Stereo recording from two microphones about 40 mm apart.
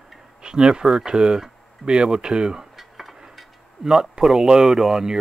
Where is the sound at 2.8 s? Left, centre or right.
Centre.